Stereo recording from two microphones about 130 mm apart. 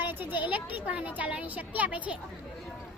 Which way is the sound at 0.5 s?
10° right (ahead or behind).